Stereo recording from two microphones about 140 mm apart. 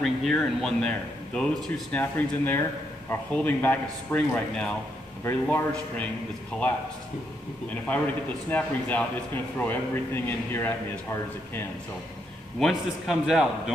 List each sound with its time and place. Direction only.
0.0 s a man's voice: centre (ahead or behind)
8.5 s a man's voice: 10° left (ahead or behind)
12.5 s speech: centre (ahead or behind)